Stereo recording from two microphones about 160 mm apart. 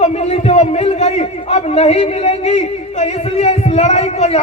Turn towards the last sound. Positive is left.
turn(degrees=40)  # may be behind; listen again after turning